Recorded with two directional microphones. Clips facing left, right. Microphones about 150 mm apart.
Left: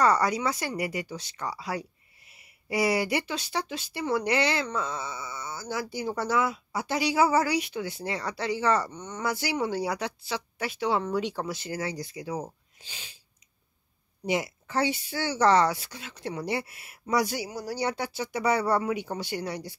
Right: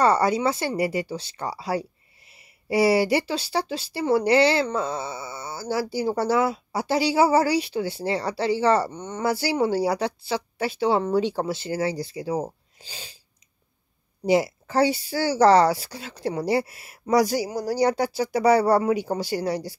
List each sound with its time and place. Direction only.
0.0 s speech: 30° right (ahead or behind)
14.2 s speech: 35° right (ahead or behind)